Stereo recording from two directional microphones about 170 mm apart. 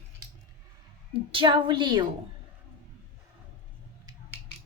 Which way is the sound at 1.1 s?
30° right (ahead or behind).